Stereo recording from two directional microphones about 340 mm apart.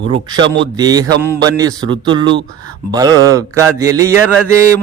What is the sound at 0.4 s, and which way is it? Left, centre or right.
Speech, right.